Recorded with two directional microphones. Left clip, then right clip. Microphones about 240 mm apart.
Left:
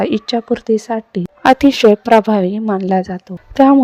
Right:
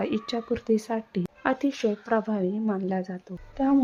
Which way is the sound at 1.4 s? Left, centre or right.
Left.